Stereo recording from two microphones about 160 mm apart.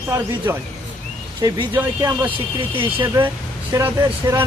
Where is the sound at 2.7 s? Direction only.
30° right (ahead or behind).